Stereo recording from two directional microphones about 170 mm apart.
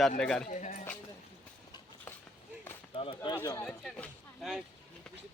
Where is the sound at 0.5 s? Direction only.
45° left (ahead or behind).